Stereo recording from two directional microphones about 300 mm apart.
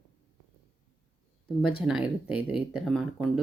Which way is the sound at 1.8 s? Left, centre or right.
Centre.